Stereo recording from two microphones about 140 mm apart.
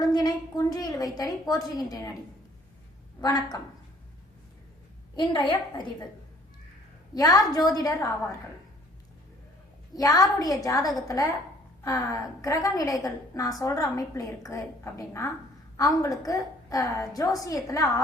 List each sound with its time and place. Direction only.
0.0 s a woman's voice: 30° left (ahead or behind)
3.2 s a woman's voice: 30° left (ahead or behind)
5.1 s a woman's voice: 35° left (ahead or behind)
7.1 s a woman's voice: 25° left (ahead or behind)
9.9 s a woman's voice: 25° left (ahead or behind)